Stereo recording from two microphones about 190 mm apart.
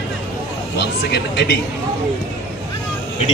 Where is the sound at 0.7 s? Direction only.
60° left (ahead or behind).